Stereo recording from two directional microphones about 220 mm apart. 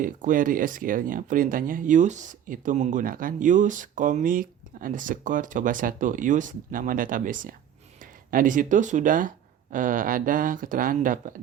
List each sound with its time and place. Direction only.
0.0 s speech: 35° right (ahead or behind)